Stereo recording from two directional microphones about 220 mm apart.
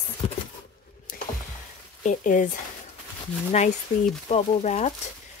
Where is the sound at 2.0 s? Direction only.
35° left (ahead or behind).